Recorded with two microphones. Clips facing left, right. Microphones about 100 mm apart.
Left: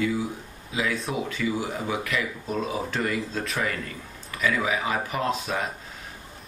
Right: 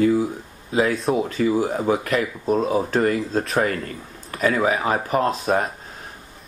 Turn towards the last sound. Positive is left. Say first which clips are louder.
# right 6 dB
turn(degrees=-40)  # may be behind; listen again after turning